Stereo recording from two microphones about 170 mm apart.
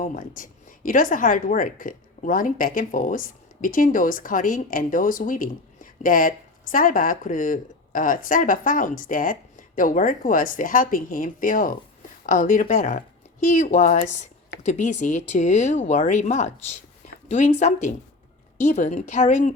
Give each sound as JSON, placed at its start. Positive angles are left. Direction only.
{"t": 0.0, "sound": "a woman's voice", "side_deg": 50}